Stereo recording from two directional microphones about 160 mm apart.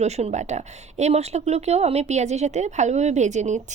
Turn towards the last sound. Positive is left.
turn(degrees=-50)  # may be behind; listen again after turning